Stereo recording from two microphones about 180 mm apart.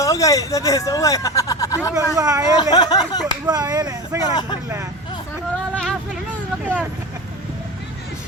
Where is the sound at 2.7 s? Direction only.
20° left (ahead or behind).